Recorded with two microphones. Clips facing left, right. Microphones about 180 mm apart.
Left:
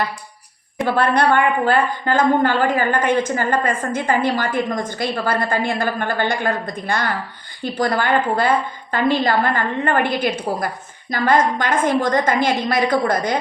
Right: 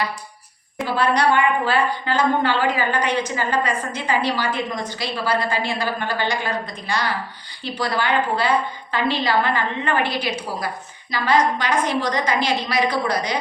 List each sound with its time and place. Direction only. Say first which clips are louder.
0.8 s a woman's voice: left 3 dB; 55° left (ahead or behind)